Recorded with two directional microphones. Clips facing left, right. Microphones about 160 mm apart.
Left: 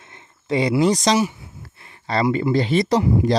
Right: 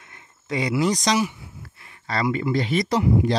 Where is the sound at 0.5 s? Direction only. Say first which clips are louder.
Left 5 dB; 25° left (ahead or behind).